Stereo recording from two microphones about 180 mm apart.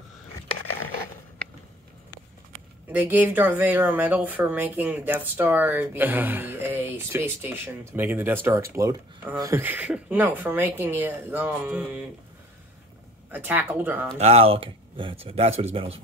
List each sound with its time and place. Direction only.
2.9 s speech: 10° right (ahead or behind)
13.3 s speech: 10° right (ahead or behind)
14.1 s speech: 35° right (ahead or behind)